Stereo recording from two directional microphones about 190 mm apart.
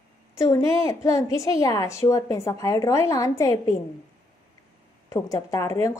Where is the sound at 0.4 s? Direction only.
15° left (ahead or behind).